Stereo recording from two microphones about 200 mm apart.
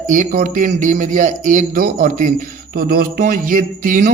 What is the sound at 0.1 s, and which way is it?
A man's voice, 40° right (ahead or behind).